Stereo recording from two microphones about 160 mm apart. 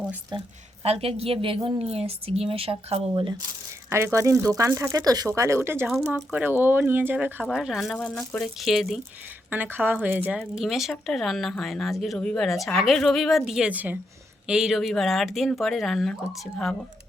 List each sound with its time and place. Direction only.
0.3 s a woman's voice: 35° right (ahead or behind)
3.8 s speech: 15° right (ahead or behind); by 9.0 s centre (ahead or behind)
9.5 s speech: 10° right (ahead or behind)